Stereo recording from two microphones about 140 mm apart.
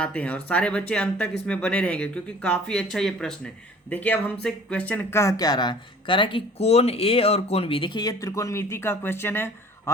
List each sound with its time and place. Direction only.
0.0 s speech: 10° left (ahead or behind)